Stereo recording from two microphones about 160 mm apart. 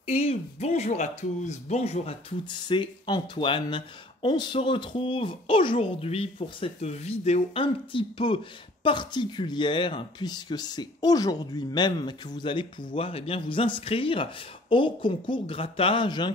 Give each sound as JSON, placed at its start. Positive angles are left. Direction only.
{"t": 0.0, "sound": "speech", "side_deg": 35}